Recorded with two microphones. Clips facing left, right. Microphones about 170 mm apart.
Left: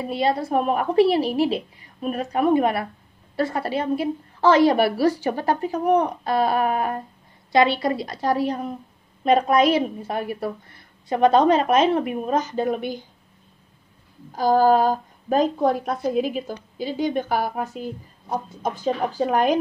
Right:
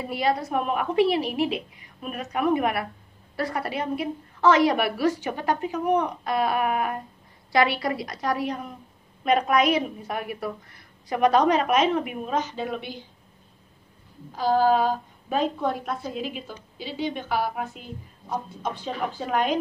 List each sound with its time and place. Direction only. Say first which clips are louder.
0.0 s a woman's voice: left 3 dB; 25° left (ahead or behind); by 13.0 s 45° left (ahead or behind)
14.3 s a woman's voice: left 4 dB; 45° left (ahead or behind)